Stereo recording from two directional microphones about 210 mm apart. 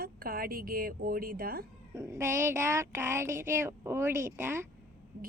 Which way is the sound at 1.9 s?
15° right (ahead or behind).